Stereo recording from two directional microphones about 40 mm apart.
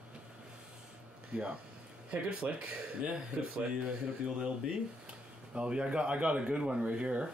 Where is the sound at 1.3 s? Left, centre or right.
Right.